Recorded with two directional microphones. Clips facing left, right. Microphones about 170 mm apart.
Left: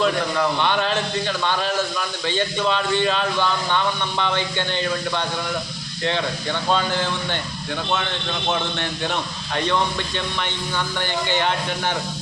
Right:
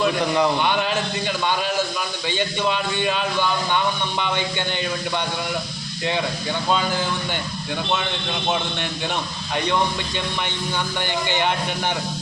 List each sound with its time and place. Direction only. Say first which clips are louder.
0.0 s a man's voice: right 1 dB; 15° right (ahead or behind)
9.6 s a man's voice: even; 15° right (ahead or behind)
11.0 s a man's voice: even; 15° right (ahead or behind)